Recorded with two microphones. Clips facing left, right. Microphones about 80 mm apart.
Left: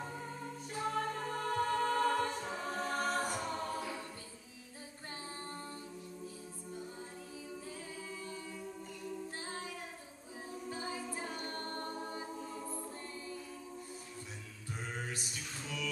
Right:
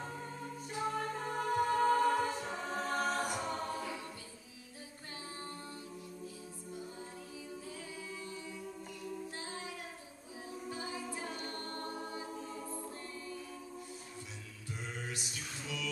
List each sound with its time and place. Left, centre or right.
0.0 s music: centre
0.7 s a capella: centre
2.4 s choir: centre
11.3 s choir: left
12.4 s choir: centre